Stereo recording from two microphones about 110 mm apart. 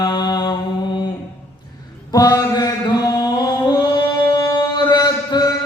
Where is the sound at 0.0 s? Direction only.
40° left (ahead or behind).